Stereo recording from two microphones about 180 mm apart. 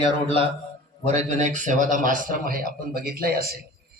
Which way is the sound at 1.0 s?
40° right (ahead or behind).